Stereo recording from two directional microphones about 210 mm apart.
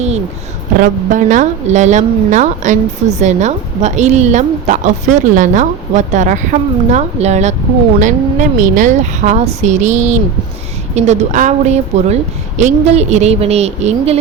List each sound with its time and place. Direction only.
0.8 s a woman's voice: 35° right (ahead or behind)